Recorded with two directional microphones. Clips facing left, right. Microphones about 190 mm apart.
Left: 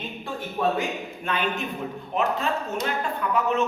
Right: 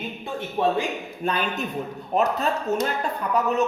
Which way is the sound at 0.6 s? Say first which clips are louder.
Right 2 dB; 30° right (ahead or behind).